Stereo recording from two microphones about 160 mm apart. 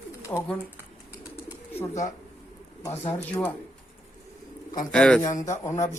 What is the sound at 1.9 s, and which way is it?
Speech, 50° left (ahead or behind).